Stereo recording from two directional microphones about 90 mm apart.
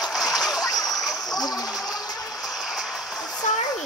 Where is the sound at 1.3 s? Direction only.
45° left (ahead or behind).